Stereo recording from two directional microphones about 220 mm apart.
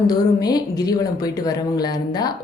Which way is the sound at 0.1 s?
15° left (ahead or behind).